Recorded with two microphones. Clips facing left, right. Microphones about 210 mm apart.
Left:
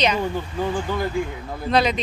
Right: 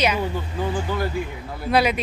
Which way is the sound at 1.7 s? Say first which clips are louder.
Even; 10° right (ahead or behind).